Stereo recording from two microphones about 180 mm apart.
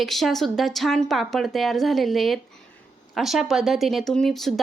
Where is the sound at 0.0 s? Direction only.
Centre (ahead or behind).